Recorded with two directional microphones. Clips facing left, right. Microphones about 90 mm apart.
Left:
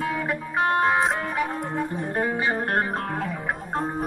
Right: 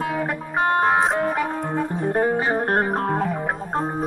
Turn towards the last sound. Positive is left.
turn(degrees=-30)  # may be behind; listen again after turning